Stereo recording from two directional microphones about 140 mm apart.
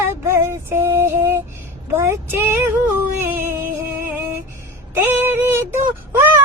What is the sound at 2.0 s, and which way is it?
Child singing, 15° right (ahead or behind).